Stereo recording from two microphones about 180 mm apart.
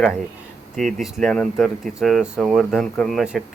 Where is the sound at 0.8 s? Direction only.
Centre (ahead or behind).